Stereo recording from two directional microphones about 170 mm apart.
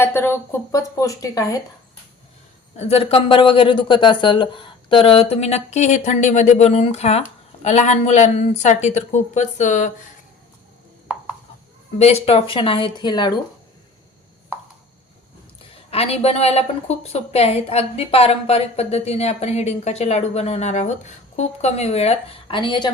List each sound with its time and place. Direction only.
0.0 s speech: 15° left (ahead or behind)
2.7 s a woman's voice: 35° left (ahead or behind)
11.9 s a woman's voice: 40° left (ahead or behind)
15.9 s a woman's voice: 35° left (ahead or behind)